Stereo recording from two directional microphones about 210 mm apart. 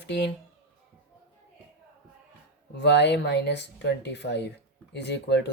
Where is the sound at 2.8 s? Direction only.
55° left (ahead or behind).